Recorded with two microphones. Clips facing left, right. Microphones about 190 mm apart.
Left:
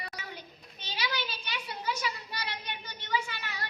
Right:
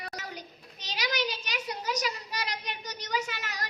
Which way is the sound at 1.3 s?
40° right (ahead or behind).